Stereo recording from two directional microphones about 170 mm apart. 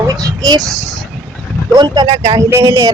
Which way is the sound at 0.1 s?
20° right (ahead or behind).